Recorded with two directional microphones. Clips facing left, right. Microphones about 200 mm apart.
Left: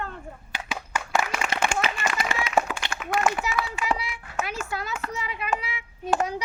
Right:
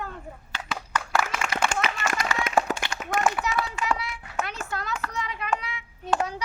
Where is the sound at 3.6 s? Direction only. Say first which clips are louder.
Even; centre (ahead or behind).